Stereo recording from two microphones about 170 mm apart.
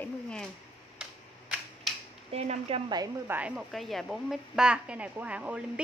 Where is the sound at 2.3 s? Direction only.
35° right (ahead or behind).